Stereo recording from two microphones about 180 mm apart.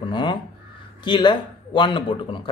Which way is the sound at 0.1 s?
25° left (ahead or behind).